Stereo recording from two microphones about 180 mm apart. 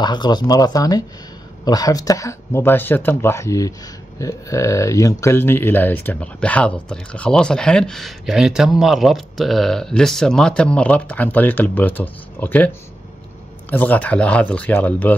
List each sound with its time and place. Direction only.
0.0 s speech: 25° left (ahead or behind)